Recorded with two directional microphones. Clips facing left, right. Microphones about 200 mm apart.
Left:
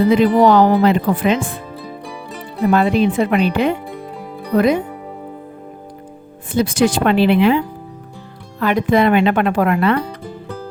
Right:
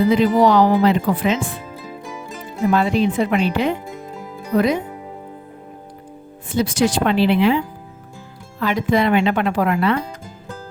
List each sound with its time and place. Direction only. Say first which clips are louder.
0.1 s speech: left 4 dB; 55° left (ahead or behind)
2.6 s speech: left 3 dB; 60° left (ahead or behind)
6.5 s speech: left 3 dB; 55° left (ahead or behind)